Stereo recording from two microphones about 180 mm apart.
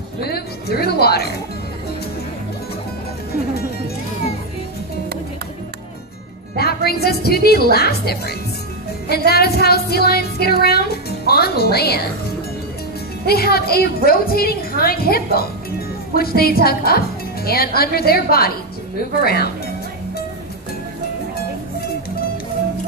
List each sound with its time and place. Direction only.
0.2 s speech: 60° left (ahead or behind)
6.5 s a woman's voice: 60° left (ahead or behind)
13.2 s speech: 60° left (ahead or behind)